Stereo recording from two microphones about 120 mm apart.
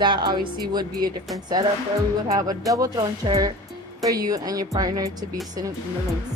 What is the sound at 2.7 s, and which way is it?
Music, 30° right (ahead or behind).